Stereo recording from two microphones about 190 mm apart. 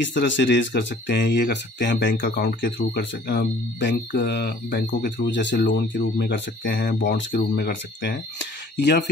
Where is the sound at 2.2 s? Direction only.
55° left (ahead or behind).